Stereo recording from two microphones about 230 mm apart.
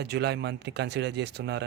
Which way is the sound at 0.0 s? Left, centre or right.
Right.